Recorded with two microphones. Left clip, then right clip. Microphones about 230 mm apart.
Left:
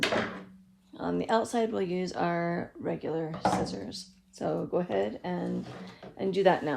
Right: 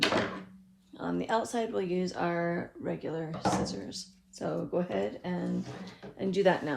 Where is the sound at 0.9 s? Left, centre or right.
Left.